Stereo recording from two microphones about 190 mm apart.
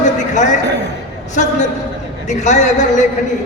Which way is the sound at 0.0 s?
40° left (ahead or behind).